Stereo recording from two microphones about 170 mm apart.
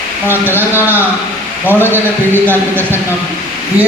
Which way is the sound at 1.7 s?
15° left (ahead or behind).